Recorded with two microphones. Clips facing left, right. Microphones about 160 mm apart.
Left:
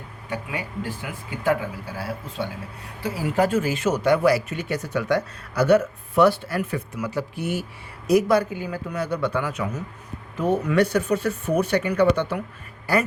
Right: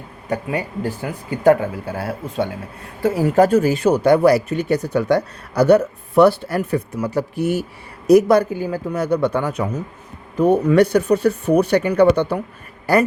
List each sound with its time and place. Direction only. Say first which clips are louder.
0.3 s speech: right 8 dB; 40° right (ahead or behind)